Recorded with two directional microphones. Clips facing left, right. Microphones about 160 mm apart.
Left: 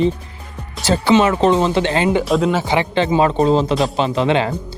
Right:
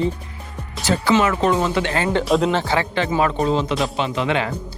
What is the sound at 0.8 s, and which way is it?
Speech, 30° left (ahead or behind).